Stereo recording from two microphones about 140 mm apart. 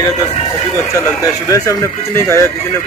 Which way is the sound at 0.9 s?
25° left (ahead or behind).